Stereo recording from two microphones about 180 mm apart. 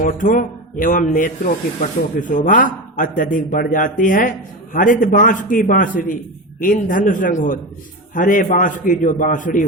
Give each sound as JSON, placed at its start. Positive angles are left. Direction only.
{"t": 0.0, "sound": "a man's voice", "side_deg": 45}